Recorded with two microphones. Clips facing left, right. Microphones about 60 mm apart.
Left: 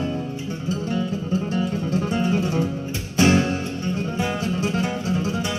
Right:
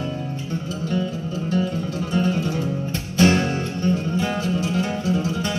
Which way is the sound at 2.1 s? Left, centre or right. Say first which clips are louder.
Right 2 dB; left.